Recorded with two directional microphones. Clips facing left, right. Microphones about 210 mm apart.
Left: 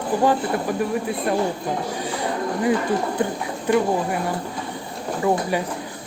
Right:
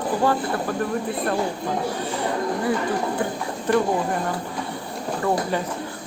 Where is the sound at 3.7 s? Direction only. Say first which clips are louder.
Left 1 dB; 10° left (ahead or behind).